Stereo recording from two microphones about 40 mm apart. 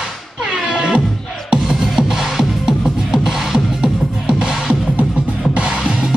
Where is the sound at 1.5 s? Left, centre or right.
Centre.